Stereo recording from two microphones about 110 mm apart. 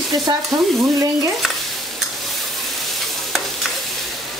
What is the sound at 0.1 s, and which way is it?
Speech, 40° right (ahead or behind).